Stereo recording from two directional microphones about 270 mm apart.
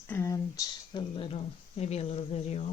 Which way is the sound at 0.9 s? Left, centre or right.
Centre.